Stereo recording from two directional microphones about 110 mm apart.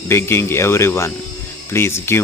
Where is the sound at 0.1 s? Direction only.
25° left (ahead or behind).